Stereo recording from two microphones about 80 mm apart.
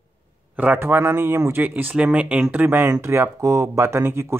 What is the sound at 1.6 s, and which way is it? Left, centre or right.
Speech, right.